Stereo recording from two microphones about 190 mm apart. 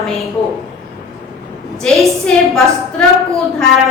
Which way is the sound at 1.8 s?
5° left (ahead or behind).